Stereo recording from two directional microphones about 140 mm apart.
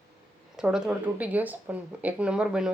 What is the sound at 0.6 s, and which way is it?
Speech, 5° right (ahead or behind).